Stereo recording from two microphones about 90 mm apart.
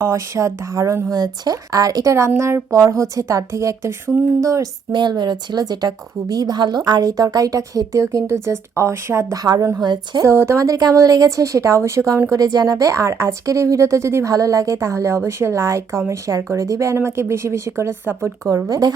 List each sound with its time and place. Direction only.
0.0 s speech: 35° right (ahead or behind)
1.1 s a woman's voice: 45° right (ahead or behind)
4.9 s a woman's voice: 55° right (ahead or behind); by 9.4 s 30° right (ahead or behind)
9.4 s a woman's voice: 45° right (ahead or behind)
10.2 s speech: 30° right (ahead or behind)
12.3 s speech: 45° right (ahead or behind); by 18.3 s 25° right (ahead or behind)
18.4 s speech: 40° right (ahead or behind)